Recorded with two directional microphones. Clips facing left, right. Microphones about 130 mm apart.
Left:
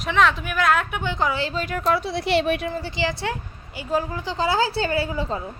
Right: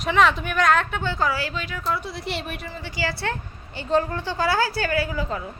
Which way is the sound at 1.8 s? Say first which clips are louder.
Left 6 dB; 85° left.